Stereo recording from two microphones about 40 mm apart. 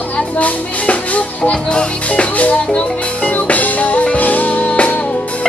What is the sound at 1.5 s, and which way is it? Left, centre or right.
Music, left.